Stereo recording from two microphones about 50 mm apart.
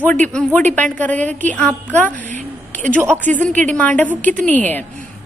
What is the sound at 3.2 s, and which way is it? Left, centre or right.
A woman's voice, left.